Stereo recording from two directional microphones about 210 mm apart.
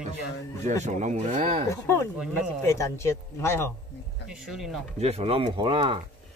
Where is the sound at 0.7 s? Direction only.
35° right (ahead or behind).